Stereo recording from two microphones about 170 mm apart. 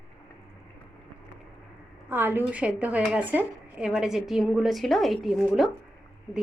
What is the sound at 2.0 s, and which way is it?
Speech, 10° right (ahead or behind).